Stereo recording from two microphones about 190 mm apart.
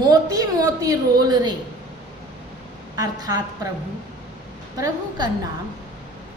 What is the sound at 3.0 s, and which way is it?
Speech, 20° right (ahead or behind).